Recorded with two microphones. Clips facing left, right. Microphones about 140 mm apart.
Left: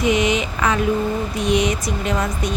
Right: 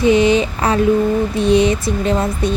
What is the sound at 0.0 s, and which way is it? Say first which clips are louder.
Speech: right 6 dB; 30° right (ahead or behind).